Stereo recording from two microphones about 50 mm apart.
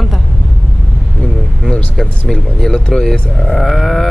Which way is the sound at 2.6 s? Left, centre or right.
Centre.